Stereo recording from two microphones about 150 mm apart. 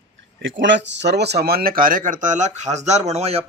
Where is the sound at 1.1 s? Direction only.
90° right.